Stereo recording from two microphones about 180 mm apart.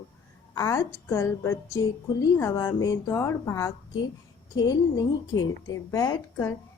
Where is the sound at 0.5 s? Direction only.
20° left (ahead or behind).